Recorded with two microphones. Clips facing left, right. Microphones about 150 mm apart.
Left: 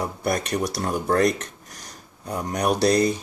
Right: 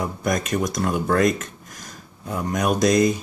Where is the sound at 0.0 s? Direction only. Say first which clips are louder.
Right 1 dB; 35° left (ahead or behind).